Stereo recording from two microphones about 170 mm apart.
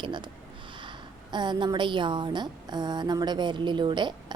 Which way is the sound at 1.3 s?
25° right (ahead or behind).